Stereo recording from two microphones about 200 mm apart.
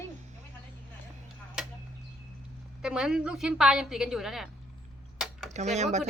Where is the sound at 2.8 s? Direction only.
5° right (ahead or behind).